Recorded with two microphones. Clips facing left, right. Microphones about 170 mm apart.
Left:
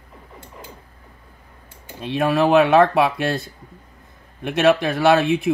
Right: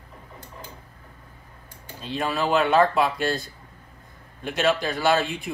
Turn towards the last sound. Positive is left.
turn(degrees=65)  # may be behind; listen again after turning